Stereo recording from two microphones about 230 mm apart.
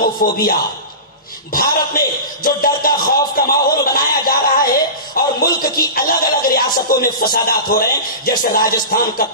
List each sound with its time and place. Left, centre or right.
0.0 s a man's voice: left